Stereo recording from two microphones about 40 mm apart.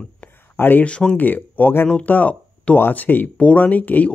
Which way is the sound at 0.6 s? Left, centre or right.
Left.